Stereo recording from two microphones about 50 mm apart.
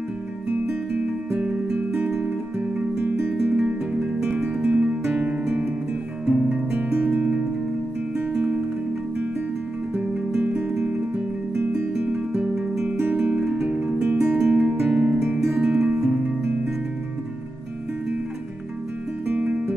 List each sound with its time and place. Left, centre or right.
0.5 s music: right; by 3.1 s centre
3.2 s music: right
3.5 s music: right
6.2 s guitar: right
7.1 s music: right
8.3 s music: right
10.4 s music: right
12.3 s music: centre
14.0 s music: right; by 16.2 s centre
19.2 s music: right